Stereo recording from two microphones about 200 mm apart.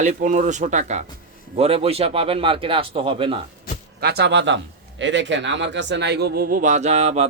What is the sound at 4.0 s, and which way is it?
Speech, 55° right (ahead or behind).